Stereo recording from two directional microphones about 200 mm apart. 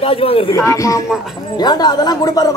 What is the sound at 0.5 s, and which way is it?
Speech, 15° left (ahead or behind).